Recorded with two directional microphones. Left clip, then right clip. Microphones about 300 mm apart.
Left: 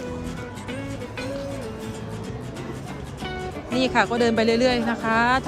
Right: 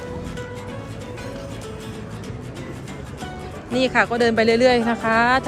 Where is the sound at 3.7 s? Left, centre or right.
Centre.